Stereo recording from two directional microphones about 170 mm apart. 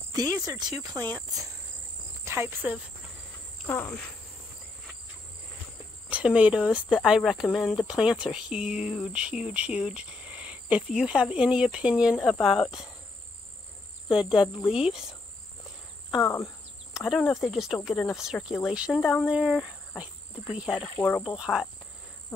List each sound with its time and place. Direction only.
0.1 s cricket: 20° right (ahead or behind)
2.2 s insect: 15° right (ahead or behind)
3.6 s cricket: 10° left (ahead or behind)
6.0 s speech: 5° right (ahead or behind)
14.0 s speech: 5° right (ahead or behind)
16.2 s speech: 20° left (ahead or behind)
16.9 s speech: centre (ahead or behind)
20.9 s insect: 10° left (ahead or behind)
21.4 s speech: centre (ahead or behind)